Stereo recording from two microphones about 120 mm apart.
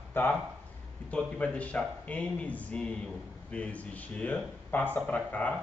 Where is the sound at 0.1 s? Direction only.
15° left (ahead or behind).